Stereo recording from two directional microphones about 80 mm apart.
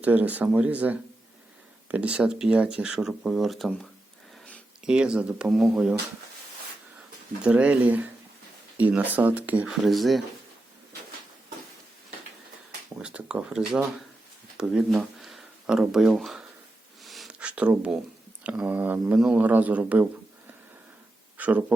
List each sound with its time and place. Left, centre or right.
0.0 s speech: centre
4.9 s speech: centre
7.4 s speech: centre
9.6 s speech: centre
13.0 s speech: centre
17.0 s a sound: centre
17.2 s a sound: centre
18.4 s speech: centre
19.1 s speech: centre
21.3 s a sound: centre